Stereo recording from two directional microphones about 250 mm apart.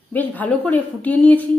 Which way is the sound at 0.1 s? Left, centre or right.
Centre.